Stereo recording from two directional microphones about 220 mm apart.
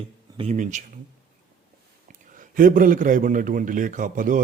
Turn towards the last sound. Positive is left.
turn(degrees=-35)  # may be behind; listen again after turning